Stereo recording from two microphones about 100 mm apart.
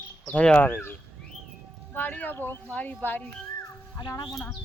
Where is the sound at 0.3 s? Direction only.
15° left (ahead or behind).